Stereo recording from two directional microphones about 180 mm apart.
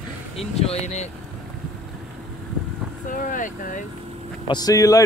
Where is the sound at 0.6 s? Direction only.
35° left (ahead or behind).